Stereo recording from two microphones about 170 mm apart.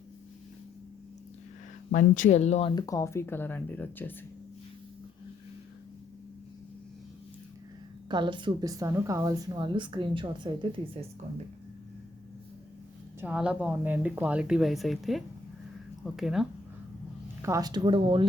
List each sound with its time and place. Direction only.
1.9 s speech: 50° left (ahead or behind)
2.7 s speech: 20° left (ahead or behind)
8.1 s a woman's voice: 25° right (ahead or behind)
13.1 s speech: 5° right (ahead or behind)
17.4 s a woman's voice: 20° right (ahead or behind)